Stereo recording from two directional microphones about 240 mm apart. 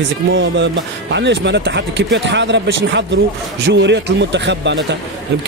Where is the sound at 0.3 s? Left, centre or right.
Right.